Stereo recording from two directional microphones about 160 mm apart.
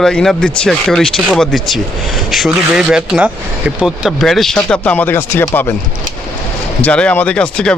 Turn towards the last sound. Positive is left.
turn(degrees=5)  # may be behind; listen again after turning